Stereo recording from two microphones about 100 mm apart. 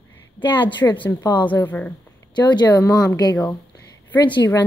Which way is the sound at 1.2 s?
45° left (ahead or behind).